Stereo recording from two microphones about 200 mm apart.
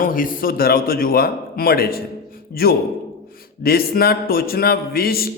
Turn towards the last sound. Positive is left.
turn(degrees=50)  # may be behind; listen again after turning